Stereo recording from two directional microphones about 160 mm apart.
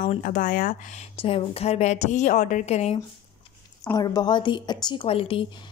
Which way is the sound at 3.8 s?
25° left (ahead or behind).